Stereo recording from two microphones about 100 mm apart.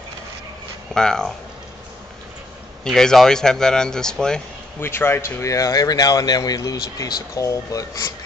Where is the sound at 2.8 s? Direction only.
5° left (ahead or behind).